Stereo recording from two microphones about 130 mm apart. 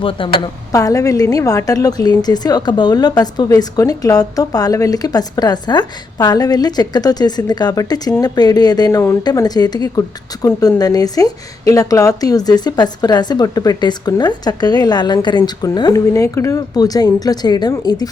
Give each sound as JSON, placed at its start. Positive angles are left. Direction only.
{"t": 0.0, "sound": "a woman's voice", "side_deg": 40}
{"t": 0.7, "sound": "a woman's voice", "side_deg": 25}